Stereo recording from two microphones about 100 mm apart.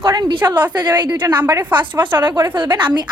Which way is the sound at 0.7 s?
45° right (ahead or behind).